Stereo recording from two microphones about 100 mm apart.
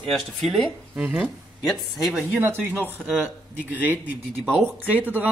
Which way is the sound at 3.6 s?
20° left (ahead or behind).